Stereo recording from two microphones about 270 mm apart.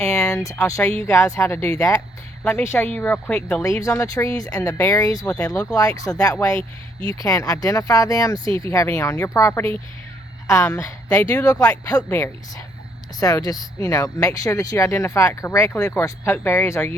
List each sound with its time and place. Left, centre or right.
0.0 s speech: centre
6.6 s speech: centre
7.2 s speech: centre
8.4 s speech: centre
8.7 s speech: centre